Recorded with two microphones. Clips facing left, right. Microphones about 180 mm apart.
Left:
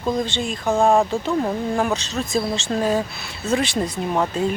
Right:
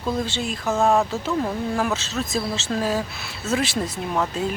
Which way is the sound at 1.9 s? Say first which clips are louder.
Left 3 dB; centre (ahead or behind).